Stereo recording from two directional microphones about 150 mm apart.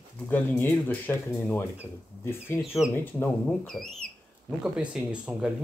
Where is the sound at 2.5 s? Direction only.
Centre (ahead or behind).